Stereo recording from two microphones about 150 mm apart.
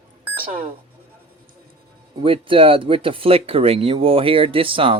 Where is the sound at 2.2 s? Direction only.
40° right (ahead or behind).